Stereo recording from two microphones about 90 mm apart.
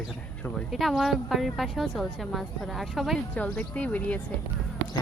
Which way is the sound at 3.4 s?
15° left (ahead or behind).